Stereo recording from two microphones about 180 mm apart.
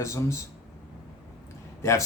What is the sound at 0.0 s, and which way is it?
Speech, 15° left (ahead or behind).